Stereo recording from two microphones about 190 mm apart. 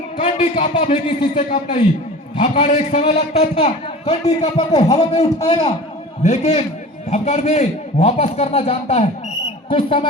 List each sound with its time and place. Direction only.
0.2 s a man's voice: 35° left (ahead or behind)
4.5 s a man's voice: 20° left (ahead or behind)
6.2 s a man's voice: 40° left (ahead or behind)